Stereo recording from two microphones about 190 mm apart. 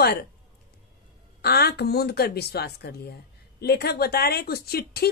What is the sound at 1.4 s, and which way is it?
Speech, 55° left (ahead or behind).